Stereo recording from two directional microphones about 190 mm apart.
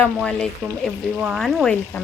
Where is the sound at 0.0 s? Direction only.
5° left (ahead or behind).